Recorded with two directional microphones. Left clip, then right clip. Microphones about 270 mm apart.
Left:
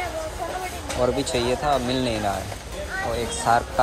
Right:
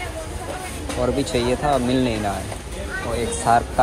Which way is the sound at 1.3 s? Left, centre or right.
Centre.